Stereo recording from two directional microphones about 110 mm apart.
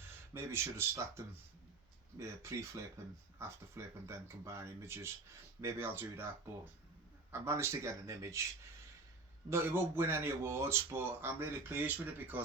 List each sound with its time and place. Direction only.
0.3 s speech: 20° right (ahead or behind)
9.5 s speech: 20° right (ahead or behind)